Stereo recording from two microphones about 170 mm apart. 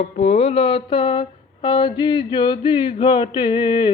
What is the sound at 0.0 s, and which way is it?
Mantra, 40° left (ahead or behind).